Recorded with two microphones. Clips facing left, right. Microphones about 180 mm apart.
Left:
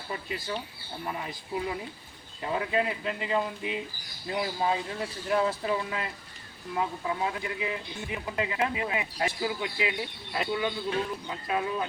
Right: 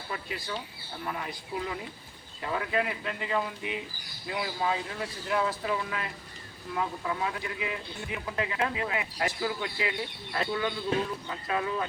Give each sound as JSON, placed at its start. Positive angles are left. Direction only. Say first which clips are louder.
{"t": 0.1, "sound": "speech", "louder": "left 2 dB", "side_deg": 20}